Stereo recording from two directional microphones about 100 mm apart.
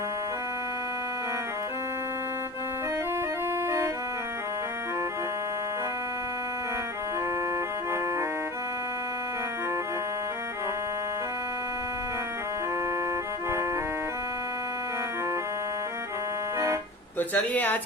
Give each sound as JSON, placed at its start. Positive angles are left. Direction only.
{"t": 17.2, "sound": "speech", "side_deg": 20}